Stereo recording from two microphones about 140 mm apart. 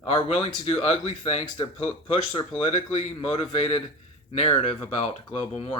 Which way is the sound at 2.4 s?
35° left (ahead or behind).